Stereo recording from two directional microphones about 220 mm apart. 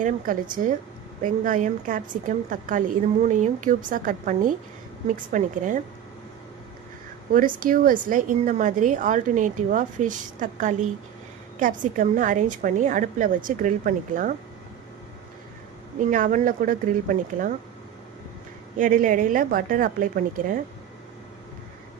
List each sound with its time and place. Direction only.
0.0 s a woman's voice: 40° right (ahead or behind)
7.3 s a woman's voice: 40° right (ahead or behind)
16.0 s a woman's voice: 35° right (ahead or behind)
18.8 s a woman's voice: 35° right (ahead or behind)